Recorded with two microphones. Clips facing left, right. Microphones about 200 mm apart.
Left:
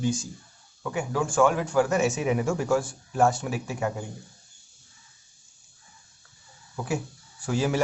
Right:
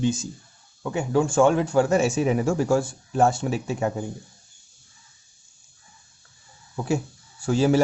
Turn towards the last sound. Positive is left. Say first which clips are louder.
# right 6 dB
turn(degrees=-30)  # may be behind; listen again after turning